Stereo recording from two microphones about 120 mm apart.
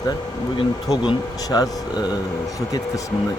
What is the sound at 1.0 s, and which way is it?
Speech, 35° left (ahead or behind).